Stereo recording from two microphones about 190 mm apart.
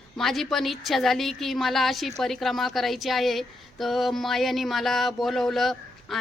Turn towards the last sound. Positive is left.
turn(degrees=0)  # may be behind; listen again after turning